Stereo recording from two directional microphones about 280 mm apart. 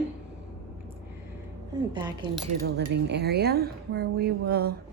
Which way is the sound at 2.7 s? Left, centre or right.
Right.